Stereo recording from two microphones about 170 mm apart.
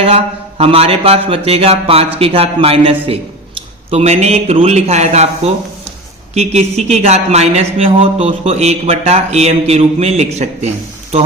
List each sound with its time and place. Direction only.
0.0 s speech: 35° right (ahead or behind)